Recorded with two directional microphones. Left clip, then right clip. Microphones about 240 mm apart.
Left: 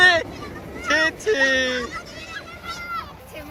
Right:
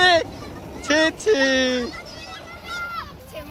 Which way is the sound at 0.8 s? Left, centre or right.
Centre.